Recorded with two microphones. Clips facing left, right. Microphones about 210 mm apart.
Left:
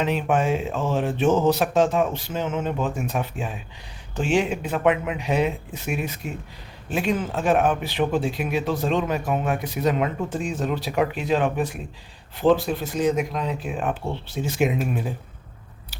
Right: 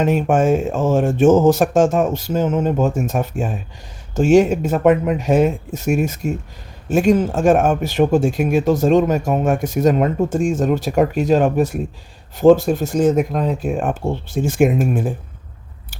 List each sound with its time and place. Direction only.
0.0 s speech: 45° right (ahead or behind)